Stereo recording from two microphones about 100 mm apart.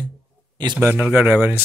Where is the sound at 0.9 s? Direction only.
15° right (ahead or behind).